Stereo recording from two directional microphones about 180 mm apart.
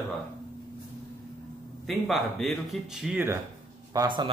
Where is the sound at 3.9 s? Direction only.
25° right (ahead or behind).